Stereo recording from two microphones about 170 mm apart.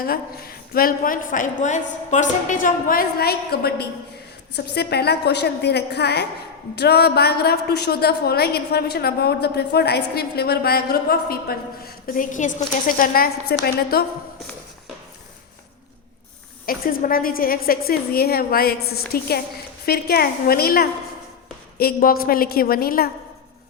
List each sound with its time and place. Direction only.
0.0 s a woman's voice: 60° left (ahead or behind)
12.0 s a woman's voice: 50° left (ahead or behind)
16.6 s a woman's voice: 60° left (ahead or behind)